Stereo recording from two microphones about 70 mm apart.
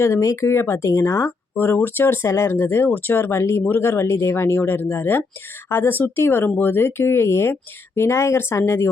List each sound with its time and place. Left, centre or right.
0.0 s speech: left